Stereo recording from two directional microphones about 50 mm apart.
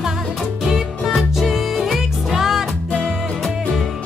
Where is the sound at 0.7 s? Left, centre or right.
Centre.